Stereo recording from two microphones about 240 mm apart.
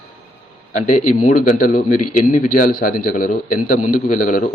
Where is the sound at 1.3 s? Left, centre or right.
Left.